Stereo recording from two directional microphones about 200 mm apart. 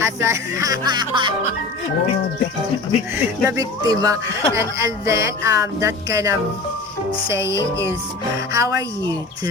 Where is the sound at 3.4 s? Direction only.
15° right (ahead or behind).